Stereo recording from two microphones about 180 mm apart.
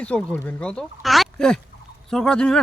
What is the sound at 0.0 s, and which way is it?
Speech, 5° left (ahead or behind).